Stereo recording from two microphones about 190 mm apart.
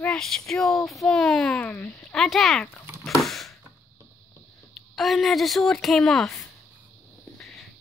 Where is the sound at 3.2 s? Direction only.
Centre (ahead or behind).